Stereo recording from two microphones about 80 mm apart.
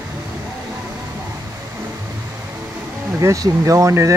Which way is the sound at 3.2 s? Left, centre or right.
Right.